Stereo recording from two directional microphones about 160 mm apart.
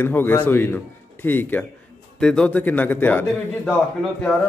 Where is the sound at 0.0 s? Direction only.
15° left (ahead or behind).